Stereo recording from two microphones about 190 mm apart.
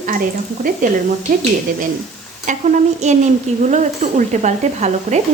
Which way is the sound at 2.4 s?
40° right (ahead or behind).